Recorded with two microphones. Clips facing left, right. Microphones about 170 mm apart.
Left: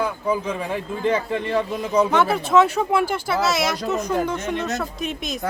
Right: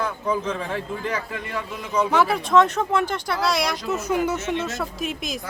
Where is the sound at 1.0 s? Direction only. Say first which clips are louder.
Left 7 dB; 25° left (ahead or behind).